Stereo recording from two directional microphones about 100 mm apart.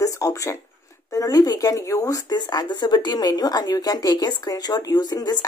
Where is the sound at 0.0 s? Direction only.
30° left (ahead or behind).